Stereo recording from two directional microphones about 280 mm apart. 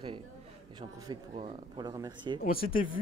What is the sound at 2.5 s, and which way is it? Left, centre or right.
Speech, left.